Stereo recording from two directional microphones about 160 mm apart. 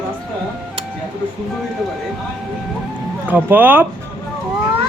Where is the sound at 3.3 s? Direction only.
10° right (ahead or behind).